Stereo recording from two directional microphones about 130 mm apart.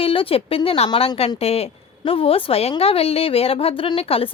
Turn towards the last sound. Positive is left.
turn(degrees=50)  # may be behind; listen again after turning